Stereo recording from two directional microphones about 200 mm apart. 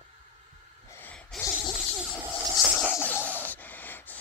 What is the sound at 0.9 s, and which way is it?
Gasp, 10° left (ahead or behind).